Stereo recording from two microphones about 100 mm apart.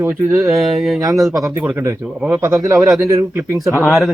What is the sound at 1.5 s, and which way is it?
Speech, 20° right (ahead or behind).